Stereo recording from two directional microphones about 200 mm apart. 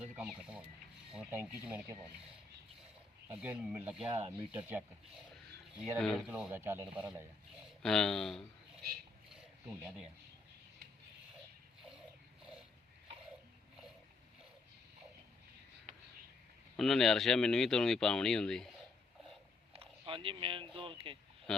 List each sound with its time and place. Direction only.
0.2 s speech: 5° right (ahead or behind)
3.2 s speech: 5° right (ahead or behind)
5.7 s speech: centre (ahead or behind)
7.8 s speech: 5° left (ahead or behind)
12.4 s a sound: 5° right (ahead or behind)
16.7 s speech: centre (ahead or behind)
19.7 s speech: 25° right (ahead or behind)